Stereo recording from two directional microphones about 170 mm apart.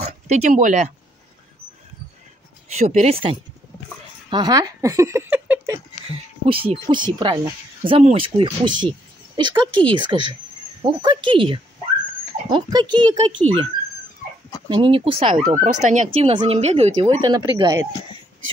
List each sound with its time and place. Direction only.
0.0 s speech: 45° right (ahead or behind)
2.8 s speech: 40° right (ahead or behind)
4.3 s speech: 25° right (ahead or behind)
6.5 s speech: 30° right (ahead or behind)
14.7 s speech: 30° right (ahead or behind)
15.6 s speech: 45° right (ahead or behind)
17.2 s speech: 25° right (ahead or behind)